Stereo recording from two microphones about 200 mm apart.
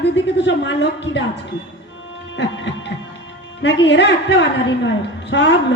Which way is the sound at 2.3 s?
65° left (ahead or behind).